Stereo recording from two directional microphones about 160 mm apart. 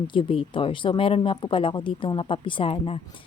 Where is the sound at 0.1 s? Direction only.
35° left (ahead or behind).